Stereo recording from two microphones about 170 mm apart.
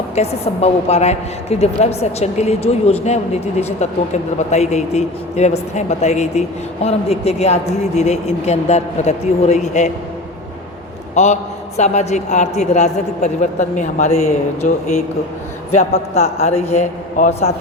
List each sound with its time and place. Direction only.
0.2 s a woman's voice: 35° left (ahead or behind)
11.1 s a man's voice: 40° left (ahead or behind)
16.1 s a woman's voice: 40° left (ahead or behind)